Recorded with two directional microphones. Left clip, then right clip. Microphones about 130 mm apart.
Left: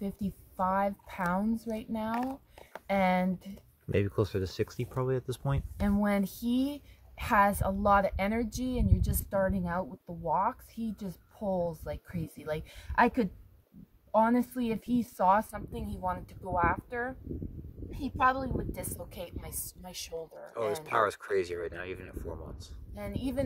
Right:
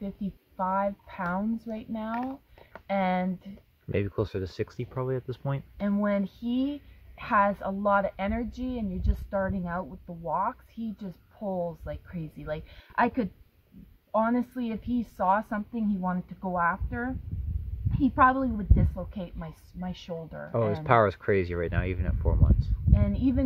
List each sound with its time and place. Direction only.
0.0 s a woman's voice: 45° left (ahead or behind)
3.9 s speech: centre (ahead or behind)
5.8 s a woman's voice: 40° left (ahead or behind)
20.6 s speech: centre (ahead or behind)
23.0 s a woman's voice: 45° left (ahead or behind)